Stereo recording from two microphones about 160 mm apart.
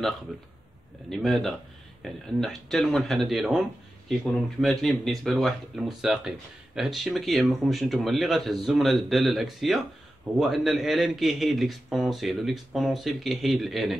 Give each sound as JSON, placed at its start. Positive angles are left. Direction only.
{"t": 1.1, "sound": "speech", "side_deg": 0}